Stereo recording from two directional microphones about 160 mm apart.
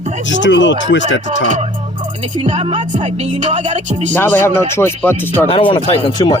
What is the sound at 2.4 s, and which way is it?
Music, 40° right (ahead or behind).